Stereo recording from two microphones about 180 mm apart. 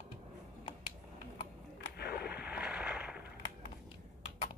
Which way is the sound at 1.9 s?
60° left (ahead or behind).